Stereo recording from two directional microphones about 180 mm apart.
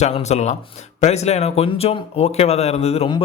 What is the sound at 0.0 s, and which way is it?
A man's voice, 40° left (ahead or behind).